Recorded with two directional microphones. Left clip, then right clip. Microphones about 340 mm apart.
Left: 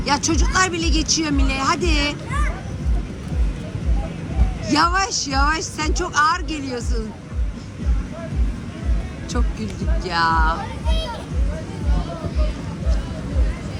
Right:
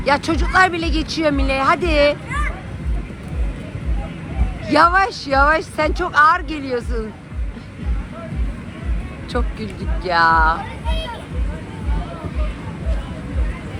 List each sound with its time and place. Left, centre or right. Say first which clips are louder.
0.0 s speech: right 3 dB; centre
4.6 s speech: right 5 dB; centre
9.3 s speech: right 4 dB; centre